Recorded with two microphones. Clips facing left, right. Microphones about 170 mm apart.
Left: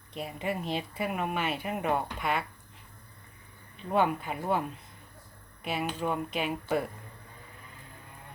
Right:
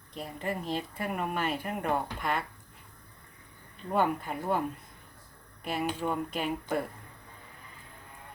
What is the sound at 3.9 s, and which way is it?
Speech, 5° left (ahead or behind).